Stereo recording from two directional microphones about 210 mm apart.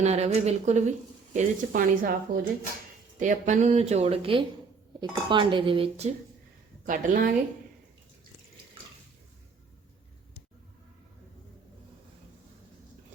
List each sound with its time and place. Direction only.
0.0 s speech: 30° right (ahead or behind)
6.8 s speech: 40° right (ahead or behind)